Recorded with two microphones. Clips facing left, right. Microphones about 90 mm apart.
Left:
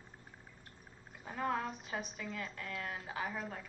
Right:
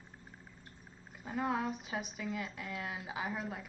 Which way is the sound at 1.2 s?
5° right (ahead or behind).